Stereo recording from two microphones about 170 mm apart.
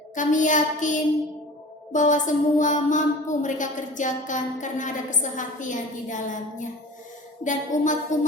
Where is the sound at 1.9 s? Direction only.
45° left (ahead or behind).